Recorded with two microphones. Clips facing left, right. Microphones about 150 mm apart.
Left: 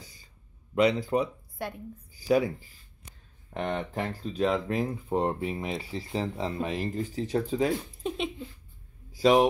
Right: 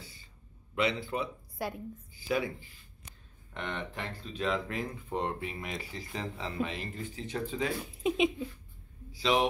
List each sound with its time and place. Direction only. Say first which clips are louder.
0.0 s a sound: even; 40° left (ahead or behind)
0.7 s speech: left 7 dB; 40° left (ahead or behind)
1.6 s a woman's voice: even; 5° right (ahead or behind)
2.1 s speech: left 7 dB; 40° left (ahead or behind)
3.5 s speech: left 7 dB; 40° left (ahead or behind)
7.8 s speech: right 4 dB; 10° right (ahead or behind)
9.1 s a man's voice: left 7 dB; 50° left (ahead or behind)